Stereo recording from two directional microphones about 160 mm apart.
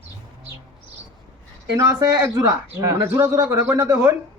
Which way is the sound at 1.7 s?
20° right (ahead or behind).